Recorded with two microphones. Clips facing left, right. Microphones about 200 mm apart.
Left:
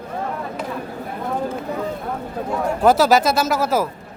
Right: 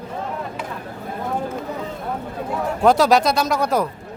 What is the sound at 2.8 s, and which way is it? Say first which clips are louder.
Speech: even; 5° left (ahead or behind).